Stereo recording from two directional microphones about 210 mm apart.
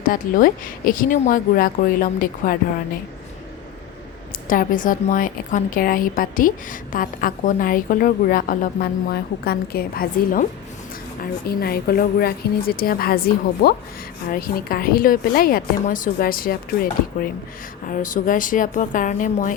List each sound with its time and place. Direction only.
0.0 s a woman's voice: 40° left (ahead or behind)
4.4 s a woman's voice: 40° left (ahead or behind)